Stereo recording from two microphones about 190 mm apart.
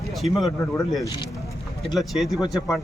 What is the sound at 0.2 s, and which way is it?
A man's voice, centre (ahead or behind).